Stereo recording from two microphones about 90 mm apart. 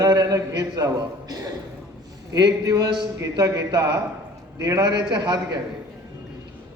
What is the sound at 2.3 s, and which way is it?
A man's voice, 50° right (ahead or behind).